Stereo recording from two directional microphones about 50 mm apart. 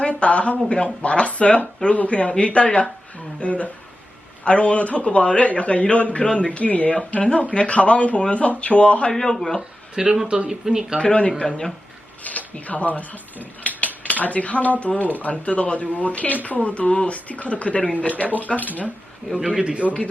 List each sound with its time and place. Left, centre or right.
0.0 s a man's voice: left
9.6 s speech: centre
10.9 s a man's voice: centre
12.2 s speech: left
14.1 s a man's voice: left
19.2 s a man's voice: right